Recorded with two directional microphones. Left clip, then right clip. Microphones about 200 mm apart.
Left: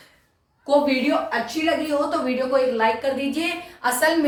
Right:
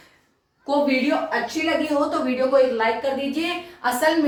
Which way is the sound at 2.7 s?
15° left (ahead or behind).